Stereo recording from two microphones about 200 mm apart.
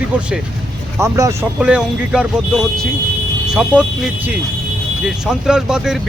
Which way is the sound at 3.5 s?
5° right (ahead or behind).